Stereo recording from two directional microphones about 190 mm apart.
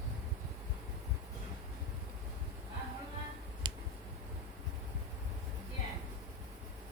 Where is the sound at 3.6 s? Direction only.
25° right (ahead or behind).